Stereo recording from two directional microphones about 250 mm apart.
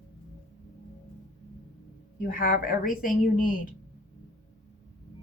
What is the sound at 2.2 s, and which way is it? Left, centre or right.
Speech, left.